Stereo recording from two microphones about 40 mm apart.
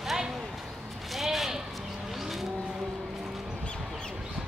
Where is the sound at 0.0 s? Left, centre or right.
Centre.